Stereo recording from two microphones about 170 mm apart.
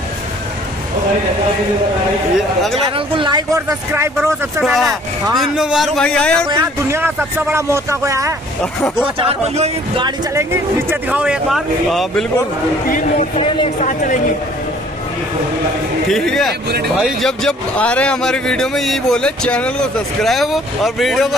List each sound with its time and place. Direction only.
3.2 s speech: 25° right (ahead or behind)
3.9 s speech: 15° right (ahead or behind)
4.6 s a man's voice: 5° right (ahead or behind)
6.5 s speech: 15° right (ahead or behind)
9.6 s speech: 30° right (ahead or behind)
10.3 s a man's voice: 15° right (ahead or behind)
12.8 s speech: 55° left (ahead or behind)
13.4 s speech: 30° left (ahead or behind)
13.8 s speech: 50° left (ahead or behind)
16.1 s a man's voice: centre (ahead or behind)
16.6 s speech: 70° right (ahead or behind)
17.0 s a man's voice: centre (ahead or behind)